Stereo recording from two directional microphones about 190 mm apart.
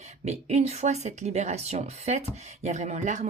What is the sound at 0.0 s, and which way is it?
A woman's voice, 35° right (ahead or behind).